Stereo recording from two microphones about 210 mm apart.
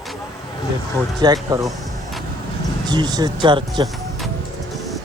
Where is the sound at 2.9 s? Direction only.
20° right (ahead or behind).